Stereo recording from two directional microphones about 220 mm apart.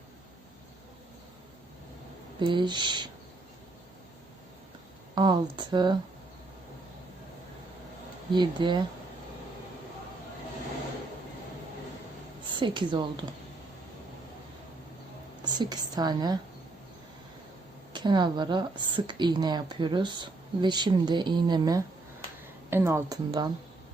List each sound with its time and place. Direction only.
2.4 s speech: 20° right (ahead or behind)
5.1 s speech: 20° right (ahead or behind)
8.3 s speech: 20° right (ahead or behind)
12.5 s speech: 20° right (ahead or behind)
15.4 s speech: 20° right (ahead or behind)
17.9 s speech: 20° right (ahead or behind)